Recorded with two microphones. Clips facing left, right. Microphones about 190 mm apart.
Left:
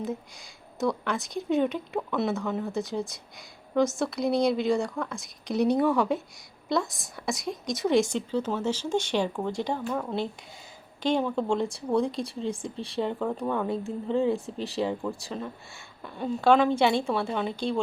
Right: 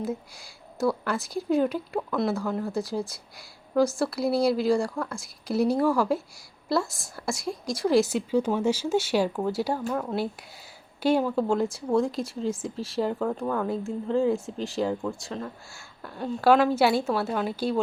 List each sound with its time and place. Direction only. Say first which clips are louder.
0.8 s a woman's voice: right 2 dB; centre (ahead or behind)